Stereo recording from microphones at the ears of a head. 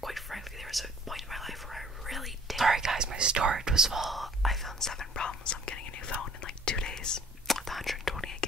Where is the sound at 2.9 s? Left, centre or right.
Right.